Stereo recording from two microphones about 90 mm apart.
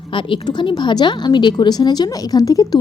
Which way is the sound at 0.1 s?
65° left (ahead or behind).